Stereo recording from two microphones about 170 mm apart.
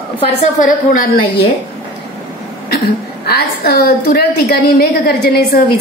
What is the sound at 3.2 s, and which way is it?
A woman's voice, 70° left (ahead or behind).